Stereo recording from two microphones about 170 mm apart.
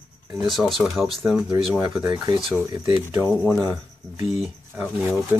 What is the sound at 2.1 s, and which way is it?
Speech, 25° right (ahead or behind).